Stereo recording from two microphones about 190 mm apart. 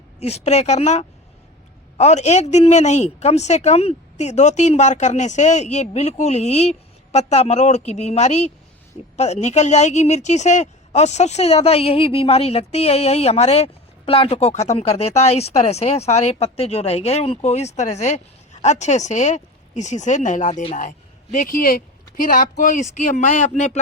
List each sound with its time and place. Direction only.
0.2 s a woman's voice: 35° left (ahead or behind)
21.3 s speech: 45° left (ahead or behind)